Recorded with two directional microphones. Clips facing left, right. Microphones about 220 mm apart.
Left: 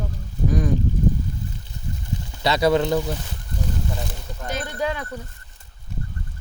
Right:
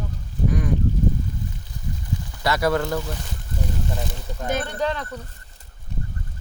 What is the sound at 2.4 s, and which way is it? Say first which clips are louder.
Speech: left 3 dB; 20° left (ahead or behind).